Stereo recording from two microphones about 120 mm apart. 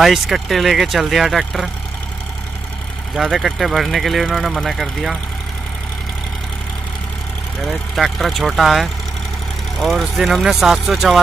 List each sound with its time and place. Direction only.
0.0 s speech: centre (ahead or behind)
3.2 s speech: centre (ahead or behind)
7.6 s speech: centre (ahead or behind)